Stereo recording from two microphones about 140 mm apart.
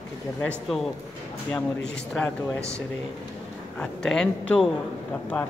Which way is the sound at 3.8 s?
5° left (ahead or behind).